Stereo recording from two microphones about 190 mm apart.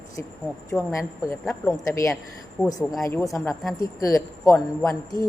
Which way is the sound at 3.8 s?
20° left (ahead or behind).